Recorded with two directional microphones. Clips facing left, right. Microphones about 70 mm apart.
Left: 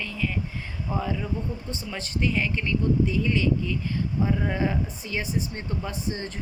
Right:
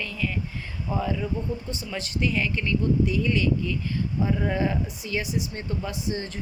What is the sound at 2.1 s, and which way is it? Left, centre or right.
Speech, left.